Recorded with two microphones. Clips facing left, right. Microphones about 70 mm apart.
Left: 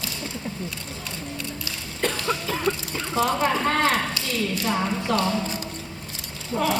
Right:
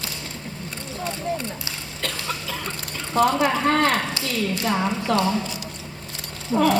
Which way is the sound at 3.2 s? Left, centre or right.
Right.